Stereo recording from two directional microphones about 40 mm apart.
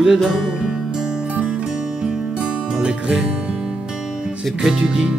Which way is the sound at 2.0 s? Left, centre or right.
Right.